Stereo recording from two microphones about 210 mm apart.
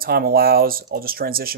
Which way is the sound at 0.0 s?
45° right (ahead or behind).